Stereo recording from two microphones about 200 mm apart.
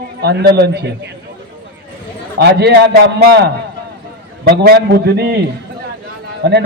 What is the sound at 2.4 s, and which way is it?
Speech, 55° right (ahead or behind).